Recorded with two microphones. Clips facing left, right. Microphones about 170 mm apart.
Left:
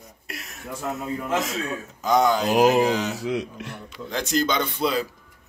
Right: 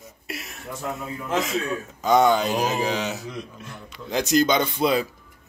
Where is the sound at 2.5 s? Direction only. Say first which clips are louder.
Left 7 dB; 85° left.